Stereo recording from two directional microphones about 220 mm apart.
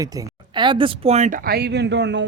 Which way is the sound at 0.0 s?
15° right (ahead or behind).